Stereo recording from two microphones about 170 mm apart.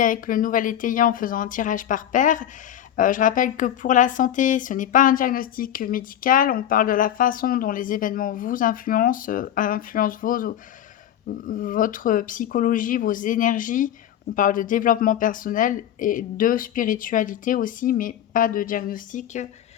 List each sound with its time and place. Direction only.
0.0 s speech: 55° left (ahead or behind)